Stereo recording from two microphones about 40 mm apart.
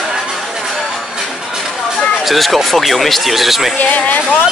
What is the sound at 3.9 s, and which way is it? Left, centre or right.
Speech, left.